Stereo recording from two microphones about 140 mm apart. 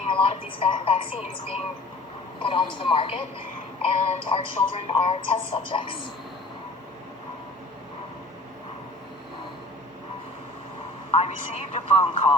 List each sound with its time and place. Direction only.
0.1 s a woman's voice: 40° left (ahead or behind)
2.4 s speech: 40° left (ahead or behind)
11.1 s speech: 50° left (ahead or behind)